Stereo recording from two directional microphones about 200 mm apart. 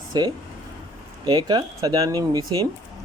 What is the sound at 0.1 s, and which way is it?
Speech, 20° right (ahead or behind).